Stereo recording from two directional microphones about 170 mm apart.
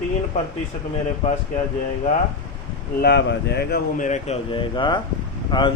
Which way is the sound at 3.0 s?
80° left.